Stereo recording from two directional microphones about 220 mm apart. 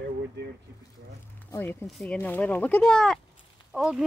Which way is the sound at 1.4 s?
10° left (ahead or behind).